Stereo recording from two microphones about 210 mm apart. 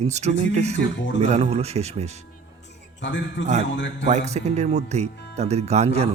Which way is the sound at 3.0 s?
60° left (ahead or behind).